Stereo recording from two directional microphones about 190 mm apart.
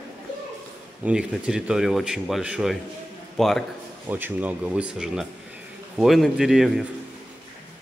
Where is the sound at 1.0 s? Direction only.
5° right (ahead or behind).